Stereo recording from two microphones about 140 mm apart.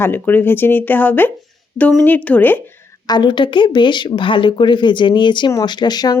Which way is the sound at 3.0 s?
30° left (ahead or behind).